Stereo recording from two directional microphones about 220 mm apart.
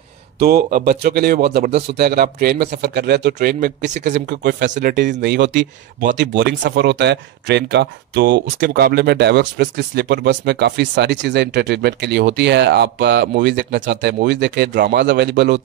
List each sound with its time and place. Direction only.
0.4 s speech: 45° right (ahead or behind)
4.4 s speech: 50° right (ahead or behind)